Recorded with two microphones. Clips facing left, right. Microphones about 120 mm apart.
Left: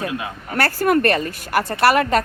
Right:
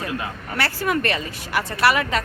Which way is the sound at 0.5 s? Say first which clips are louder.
Left 6 dB; 45° left (ahead or behind).